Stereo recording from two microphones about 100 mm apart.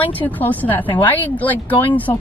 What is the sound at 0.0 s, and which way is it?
Speech, 15° left (ahead or behind).